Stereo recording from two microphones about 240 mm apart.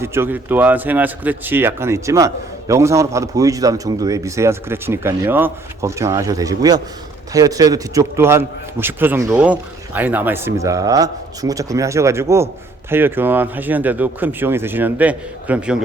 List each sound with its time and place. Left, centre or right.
0.0 s speech: centre